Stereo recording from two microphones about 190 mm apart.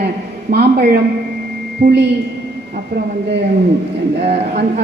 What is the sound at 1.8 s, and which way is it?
Speech, 65° right (ahead or behind).